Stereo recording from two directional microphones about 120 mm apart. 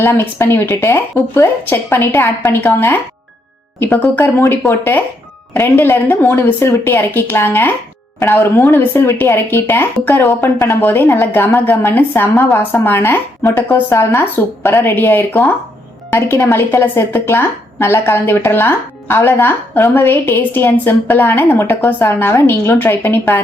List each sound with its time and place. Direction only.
0.0 s a woman's voice: 20° left (ahead or behind)